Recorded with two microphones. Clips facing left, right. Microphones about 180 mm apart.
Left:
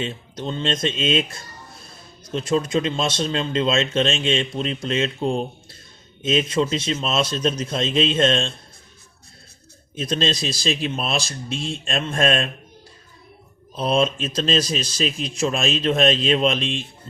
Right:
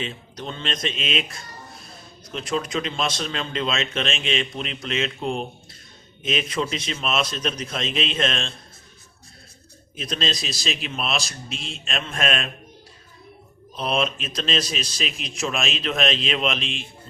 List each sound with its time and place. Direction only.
0.0 s speech: 30° left (ahead or behind)
2.3 s a man's voice: 30° left (ahead or behind)
10.0 s speech: 35° left (ahead or behind)
13.8 s speech: 35° left (ahead or behind)